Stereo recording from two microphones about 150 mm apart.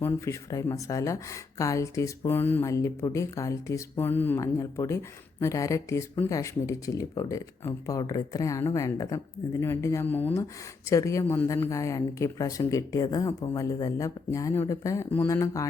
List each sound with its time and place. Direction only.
0.0 s speech: 20° left (ahead or behind)